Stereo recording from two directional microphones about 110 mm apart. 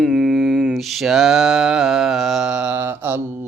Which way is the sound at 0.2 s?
5° left (ahead or behind).